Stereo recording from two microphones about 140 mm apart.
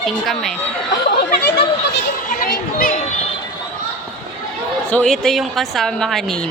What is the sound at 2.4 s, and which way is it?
Children playing, 90° left.